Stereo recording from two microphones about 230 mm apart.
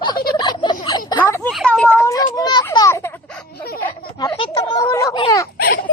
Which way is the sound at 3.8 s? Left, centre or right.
Centre.